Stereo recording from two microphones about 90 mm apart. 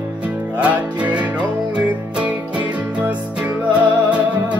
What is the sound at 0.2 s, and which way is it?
Music, 15° right (ahead or behind).